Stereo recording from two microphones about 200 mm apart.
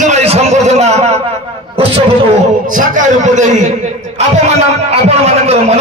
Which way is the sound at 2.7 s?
40° right (ahead or behind).